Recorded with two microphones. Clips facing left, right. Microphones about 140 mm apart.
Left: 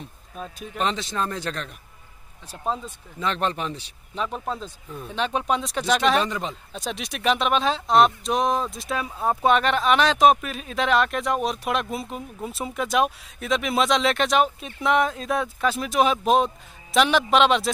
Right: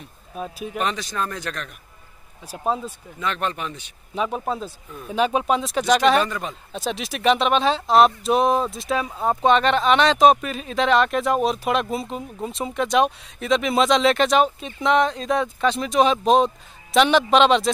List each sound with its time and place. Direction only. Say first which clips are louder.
0.4 s speech: right 3 dB; 10° right (ahead or behind)
0.8 s speech: left 2 dB; 25° left (ahead or behind)
2.4 s speech: right 4 dB; 10° right (ahead or behind)
3.2 s speech: left 1 dB; 30° left (ahead or behind)
4.1 s speech: right 4 dB; 5° right (ahead or behind)
6.2 s speech: even; 20° left (ahead or behind)
6.7 s speech: right 4 dB; centre (ahead or behind)